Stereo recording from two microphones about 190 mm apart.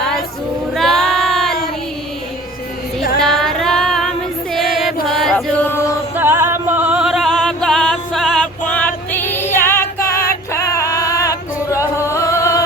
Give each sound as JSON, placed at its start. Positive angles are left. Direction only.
{"t": 0.7, "sound": "female singing", "side_deg": 0}
{"t": 3.2, "sound": "female singing", "side_deg": 0}
{"t": 4.5, "sound": "music", "side_deg": 0}
{"t": 6.1, "sound": "music", "side_deg": -10}
{"t": 10.0, "sound": "female singing", "side_deg": 50}
{"t": 10.5, "sound": "female singing", "side_deg": 15}